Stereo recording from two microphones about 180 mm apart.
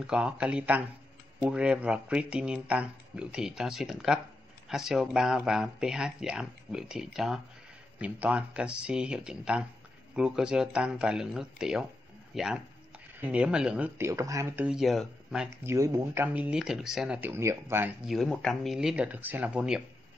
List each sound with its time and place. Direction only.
0.0 s speech: 5° right (ahead or behind)
15.7 s speech: 15° right (ahead or behind)
18.0 s speech: centre (ahead or behind)